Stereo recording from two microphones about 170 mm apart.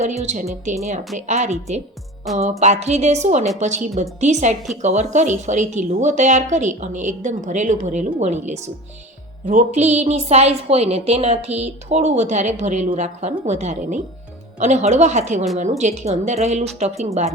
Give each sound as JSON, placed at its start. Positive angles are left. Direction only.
{"t": 0.0, "sound": "a woman's voice", "side_deg": -40}